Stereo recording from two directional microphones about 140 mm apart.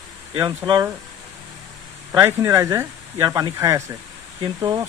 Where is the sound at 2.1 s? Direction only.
15° right (ahead or behind).